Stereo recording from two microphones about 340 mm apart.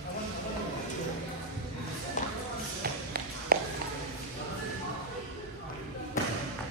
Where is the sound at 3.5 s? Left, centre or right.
Right.